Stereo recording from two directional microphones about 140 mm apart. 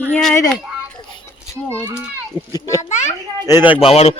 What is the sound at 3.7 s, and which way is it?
Speech, 45° left (ahead or behind).